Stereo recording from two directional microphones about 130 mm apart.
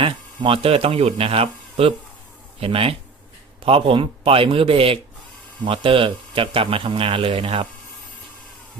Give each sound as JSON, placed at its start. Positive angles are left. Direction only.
{"t": 0.0, "sound": "a man's voice", "side_deg": -45}